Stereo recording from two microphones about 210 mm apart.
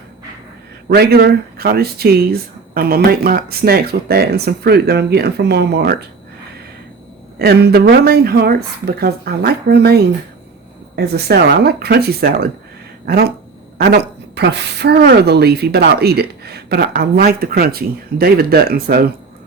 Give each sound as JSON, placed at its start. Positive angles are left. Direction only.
{"t": 0.9, "sound": "a woman's voice", "side_deg": -50}
{"t": 7.3, "sound": "a woman's voice", "side_deg": -50}
{"t": 10.9, "sound": "a woman's voice", "side_deg": -50}